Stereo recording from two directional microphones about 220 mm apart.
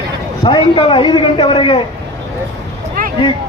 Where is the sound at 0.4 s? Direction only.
20° left (ahead or behind).